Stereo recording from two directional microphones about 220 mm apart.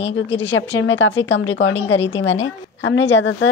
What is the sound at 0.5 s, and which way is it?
A woman's voice, 60° left (ahead or behind).